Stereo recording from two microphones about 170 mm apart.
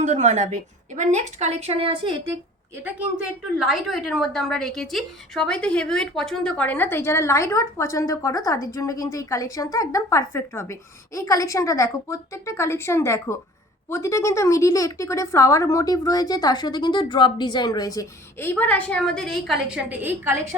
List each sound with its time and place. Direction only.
0.0 s a woman's voice: 45° right (ahead or behind)
3.6 s a woman's voice: centre (ahead or behind)